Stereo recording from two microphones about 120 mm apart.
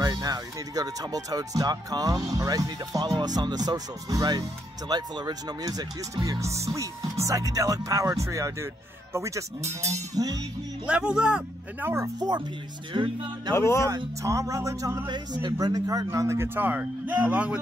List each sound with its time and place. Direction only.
0.0 s speech: 30° right (ahead or behind)
10.9 s a man's voice: 10° right (ahead or behind)
11.9 s speech: 25° right (ahead or behind)
12.9 s speech: 40° right (ahead or behind)
13.6 s speech: 25° left (ahead or behind)
13.8 s a man's voice: 25° right (ahead or behind)